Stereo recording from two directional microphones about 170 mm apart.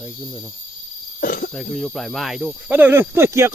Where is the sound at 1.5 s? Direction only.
Centre (ahead or behind).